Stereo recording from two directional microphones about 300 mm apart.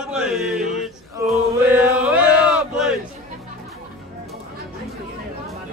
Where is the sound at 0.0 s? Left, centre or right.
Centre.